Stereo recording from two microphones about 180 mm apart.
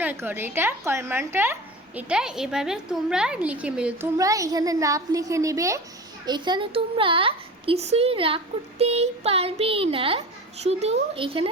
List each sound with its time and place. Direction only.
0.0 s a woman's voice: 10° right (ahead or behind)
4.2 s a woman's voice: 20° right (ahead or behind)